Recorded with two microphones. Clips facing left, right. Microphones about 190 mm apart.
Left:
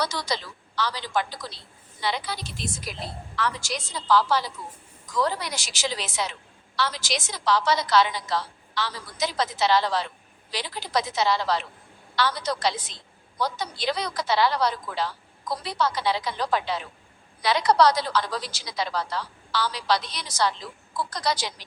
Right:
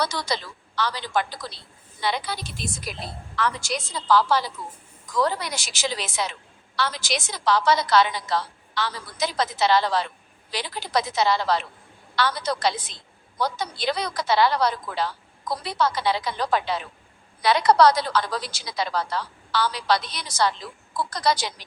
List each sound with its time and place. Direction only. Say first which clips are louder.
0.0 s a woman's voice: right 2 dB; 55° right (ahead or behind)